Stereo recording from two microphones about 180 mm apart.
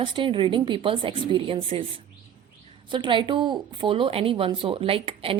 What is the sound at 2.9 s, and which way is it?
A woman's voice, 25° right (ahead or behind).